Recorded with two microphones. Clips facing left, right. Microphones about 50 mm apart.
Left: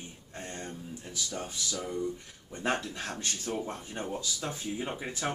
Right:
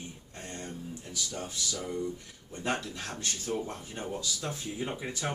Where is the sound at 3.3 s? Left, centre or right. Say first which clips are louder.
Right 2 dB; centre.